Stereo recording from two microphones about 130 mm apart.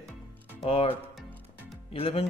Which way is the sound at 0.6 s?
50° left (ahead or behind).